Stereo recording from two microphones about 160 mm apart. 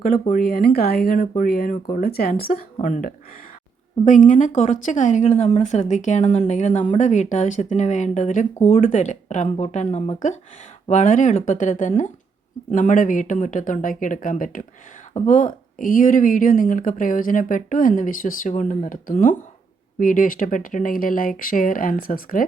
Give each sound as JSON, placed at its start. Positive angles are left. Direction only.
{"t": 0.0, "sound": "speech", "side_deg": 60}
{"t": 2.8, "sound": "speech", "side_deg": 50}